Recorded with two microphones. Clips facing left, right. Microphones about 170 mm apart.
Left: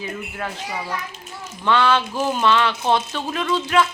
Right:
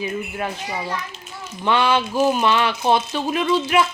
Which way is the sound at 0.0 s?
15° right (ahead or behind).